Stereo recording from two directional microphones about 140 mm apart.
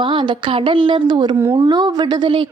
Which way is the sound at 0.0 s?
35° right (ahead or behind).